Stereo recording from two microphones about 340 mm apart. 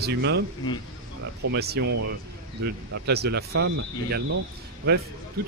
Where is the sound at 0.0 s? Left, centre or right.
Right.